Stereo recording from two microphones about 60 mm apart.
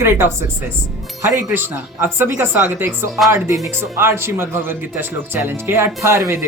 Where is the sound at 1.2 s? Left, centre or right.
Right.